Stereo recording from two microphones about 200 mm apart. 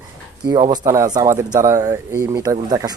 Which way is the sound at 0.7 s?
20° right (ahead or behind).